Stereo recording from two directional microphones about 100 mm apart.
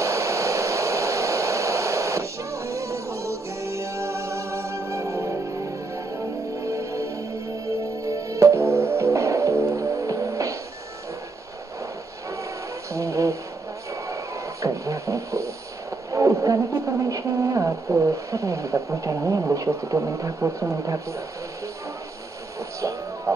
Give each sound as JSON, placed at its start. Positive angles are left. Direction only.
{"t": 0.0, "sound": "hair dryer", "side_deg": -30}
{"t": 6.6, "sound": "music", "side_deg": -30}
{"t": 12.9, "sound": "a sound", "side_deg": -30}
{"t": 16.1, "sound": "speech", "side_deg": -30}
{"t": 23.3, "sound": "music", "side_deg": -30}